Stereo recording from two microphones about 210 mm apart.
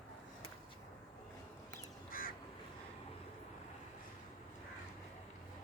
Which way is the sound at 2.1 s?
45° left (ahead or behind).